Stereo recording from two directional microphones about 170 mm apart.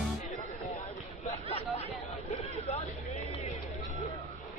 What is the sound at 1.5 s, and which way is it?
Chatter, 35° left (ahead or behind).